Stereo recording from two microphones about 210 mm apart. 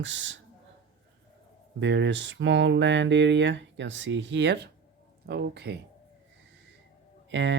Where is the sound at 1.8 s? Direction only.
60° right (ahead or behind).